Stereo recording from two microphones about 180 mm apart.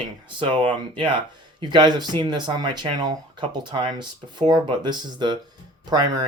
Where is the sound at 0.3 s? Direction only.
25° right (ahead or behind).